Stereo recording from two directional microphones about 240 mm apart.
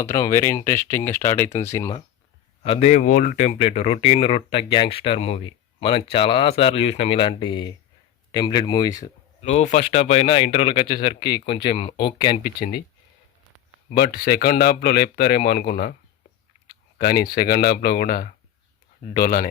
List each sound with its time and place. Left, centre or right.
0.0 s speech: centre
2.6 s speech: left
9.4 s speech: left
12.4 s speech: left
13.9 s speech: left
17.0 s speech: left